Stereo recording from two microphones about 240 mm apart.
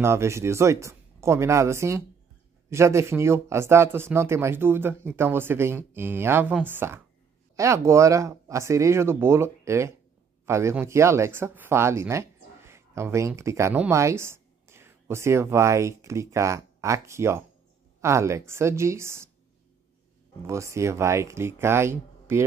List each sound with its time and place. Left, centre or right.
0.0 s speech: centre
20.4 s speech: centre